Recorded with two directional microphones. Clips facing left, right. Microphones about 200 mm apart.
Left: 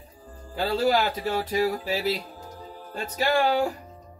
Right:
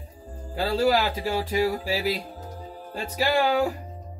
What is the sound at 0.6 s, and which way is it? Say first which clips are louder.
Speech: right 1 dB; 10° right (ahead or behind).